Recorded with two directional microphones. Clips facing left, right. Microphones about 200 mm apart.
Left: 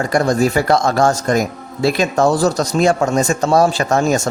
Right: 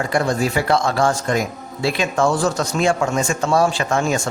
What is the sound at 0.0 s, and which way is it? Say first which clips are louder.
Speech: left 4 dB; 40° left (ahead or behind).